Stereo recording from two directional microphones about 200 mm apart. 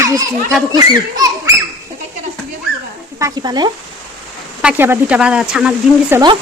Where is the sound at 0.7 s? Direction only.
20° right (ahead or behind).